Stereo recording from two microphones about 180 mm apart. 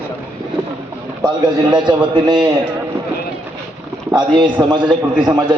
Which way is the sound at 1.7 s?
25° right (ahead or behind).